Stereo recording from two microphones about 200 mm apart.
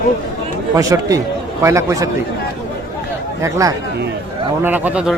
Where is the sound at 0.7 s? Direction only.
15° right (ahead or behind).